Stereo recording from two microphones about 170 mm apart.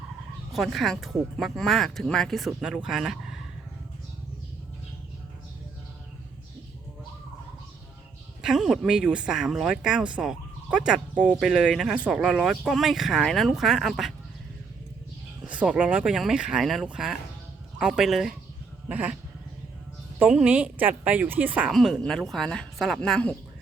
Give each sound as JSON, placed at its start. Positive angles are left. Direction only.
{"t": 0.5, "sound": "speech", "side_deg": 0}
{"t": 8.4, "sound": "speech", "side_deg": 0}
{"t": 15.4, "sound": "speech", "side_deg": -5}
{"t": 20.1, "sound": "speech", "side_deg": -5}